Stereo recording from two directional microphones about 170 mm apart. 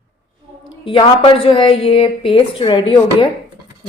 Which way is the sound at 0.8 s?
30° left (ahead or behind).